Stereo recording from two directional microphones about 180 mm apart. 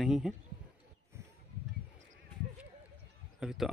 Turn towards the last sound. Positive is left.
turn(degrees=0)  # may be behind; listen again after turning